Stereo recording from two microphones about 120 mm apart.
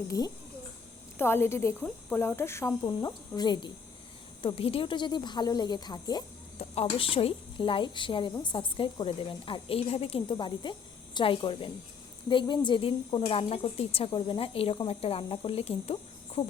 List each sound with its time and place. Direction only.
1.2 s speech: 20° left (ahead or behind)
2.8 s speech: 35° left (ahead or behind)
4.4 s speech: 50° left (ahead or behind)
6.8 s speech: 50° left (ahead or behind)